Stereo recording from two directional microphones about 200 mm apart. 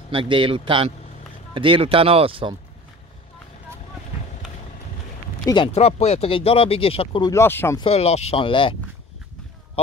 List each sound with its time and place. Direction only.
0.1 s speech: 25° right (ahead or behind)
5.4 s speech: 25° left (ahead or behind)
7.8 s speech: 30° left (ahead or behind)